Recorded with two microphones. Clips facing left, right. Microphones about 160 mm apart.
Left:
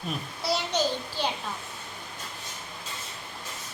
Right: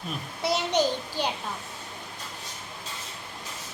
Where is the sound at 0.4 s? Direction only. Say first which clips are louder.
Right 3 dB; 20° right (ahead or behind).